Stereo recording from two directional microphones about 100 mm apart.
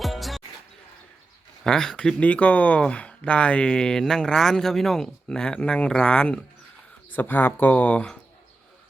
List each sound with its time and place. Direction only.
0.0 s music: centre (ahead or behind)
1.6 s speech: 5° left (ahead or behind)